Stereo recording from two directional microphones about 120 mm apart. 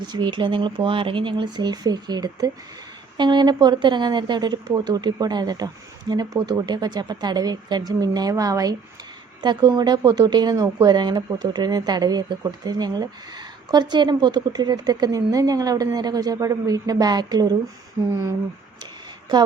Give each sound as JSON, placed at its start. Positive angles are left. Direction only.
{"t": 0.0, "sound": "speech", "side_deg": -40}